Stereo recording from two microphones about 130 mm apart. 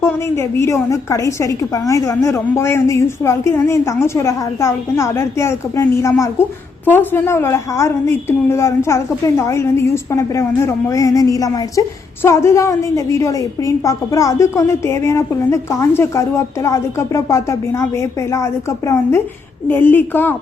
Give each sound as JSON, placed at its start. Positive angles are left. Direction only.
{"t": 0.0, "sound": "a woman's voice", "side_deg": 20}